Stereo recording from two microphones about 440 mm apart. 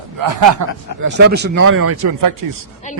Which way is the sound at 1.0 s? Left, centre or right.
Right.